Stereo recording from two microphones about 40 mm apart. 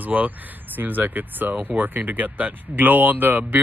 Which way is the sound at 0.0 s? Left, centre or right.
Right.